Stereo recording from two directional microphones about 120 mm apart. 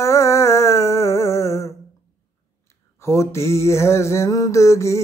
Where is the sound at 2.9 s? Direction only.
20° left (ahead or behind).